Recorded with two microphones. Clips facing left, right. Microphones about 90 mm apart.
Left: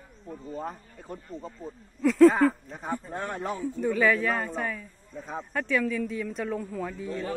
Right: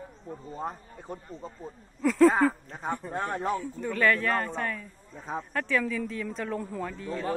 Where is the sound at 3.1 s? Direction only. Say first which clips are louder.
Right 2 dB; 30° right (ahead or behind).